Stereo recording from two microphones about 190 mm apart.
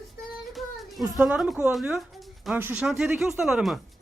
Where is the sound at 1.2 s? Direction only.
5° right (ahead or behind).